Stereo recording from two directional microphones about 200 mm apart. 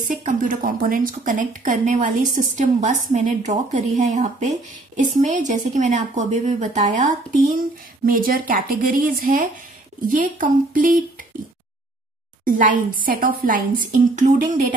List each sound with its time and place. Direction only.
0.0 s a woman's voice: 35° right (ahead or behind)
12.4 s a woman's voice: 40° right (ahead or behind)